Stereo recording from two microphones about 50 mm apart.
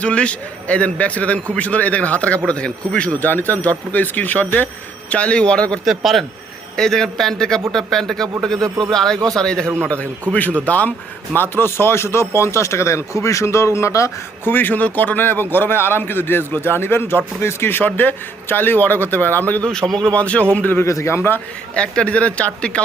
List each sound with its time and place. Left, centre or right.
0.0 s a man's voice: left
3.2 s speech: left
5.0 s a man's voice: left
5.8 s a man's voice: centre
6.7 s speech: centre
9.9 s a man's voice: left
11.3 s speech: left
14.4 s a man's voice: left
19.6 s speech: centre
20.1 s a man's voice: left
20.8 s a man's voice: left
21.1 s a man's voice: left
21.8 s a man's voice: left